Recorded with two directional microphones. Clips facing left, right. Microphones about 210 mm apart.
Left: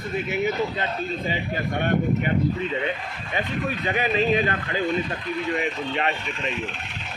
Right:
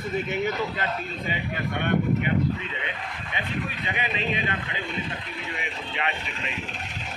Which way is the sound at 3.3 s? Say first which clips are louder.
Left 5 dB; 40° left (ahead or behind).